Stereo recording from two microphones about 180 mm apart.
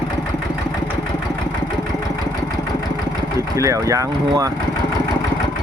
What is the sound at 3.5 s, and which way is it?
Speech, 15° right (ahead or behind).